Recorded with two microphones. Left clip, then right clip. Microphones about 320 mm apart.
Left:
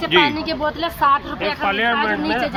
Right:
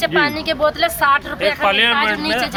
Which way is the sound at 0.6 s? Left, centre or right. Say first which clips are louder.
Right 3 dB; right.